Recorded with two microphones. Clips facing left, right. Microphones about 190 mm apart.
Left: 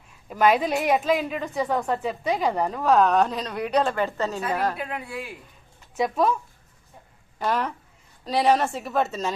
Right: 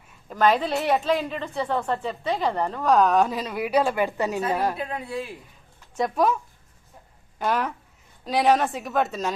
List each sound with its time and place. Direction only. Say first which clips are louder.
0.1 s a woman's voice: left 1 dB; 10° left (ahead or behind); by 5.2 s 25° right (ahead or behind)
6.0 s a woman's voice: even; centre (ahead or behind)